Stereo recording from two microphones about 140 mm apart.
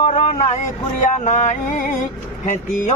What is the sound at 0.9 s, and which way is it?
Speech, 65° left (ahead or behind).